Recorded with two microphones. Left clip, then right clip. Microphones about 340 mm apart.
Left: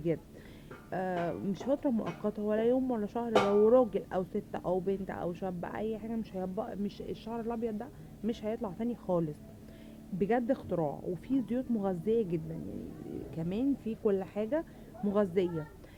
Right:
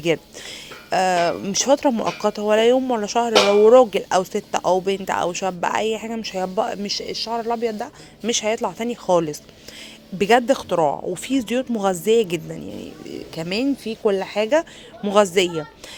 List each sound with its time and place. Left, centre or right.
0.9 s speech: centre
10.2 s speech: centre